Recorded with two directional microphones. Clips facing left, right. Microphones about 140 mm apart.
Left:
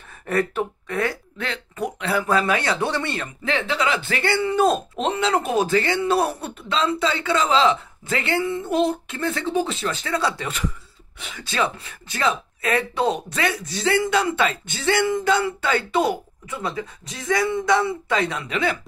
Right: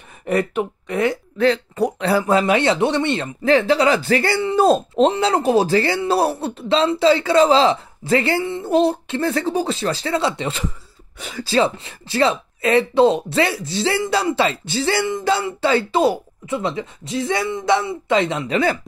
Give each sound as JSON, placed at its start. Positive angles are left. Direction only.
{"t": 0.3, "sound": "speech", "side_deg": -15}
{"t": 1.4, "sound": "speech", "side_deg": -35}
{"t": 3.4, "sound": "speech", "side_deg": -35}
{"t": 11.1, "sound": "speech", "side_deg": -40}